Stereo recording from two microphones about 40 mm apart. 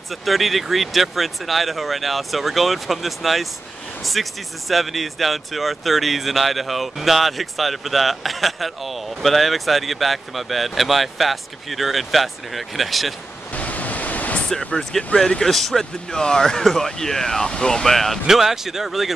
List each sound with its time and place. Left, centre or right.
0.1 s speech: centre
13.5 s waves: left
14.8 s speech: centre
18.2 s speech: centre